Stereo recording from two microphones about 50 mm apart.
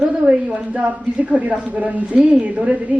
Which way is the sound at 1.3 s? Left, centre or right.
Right.